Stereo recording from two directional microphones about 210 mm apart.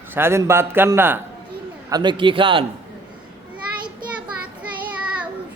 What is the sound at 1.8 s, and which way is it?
Speech, 20° right (ahead or behind).